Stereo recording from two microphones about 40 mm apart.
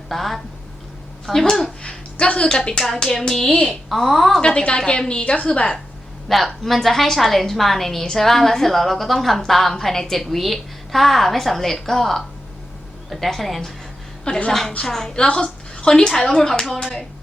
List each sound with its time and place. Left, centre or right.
0.1 s a woman's voice: centre
1.8 s a woman's voice: left
2.8 s speech: centre
3.5 s a woman's voice: centre
3.8 s a woman's voice: centre
4.4 s a woman's voice: left
6.2 s a woman's voice: centre
14.3 s a woman's voice: left
14.8 s speech: centre
15.1 s a woman's voice: left; by 17.1 s centre